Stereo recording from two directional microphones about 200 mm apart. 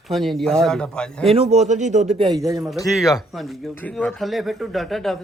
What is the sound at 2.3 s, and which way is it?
Speech, 15° right (ahead or behind).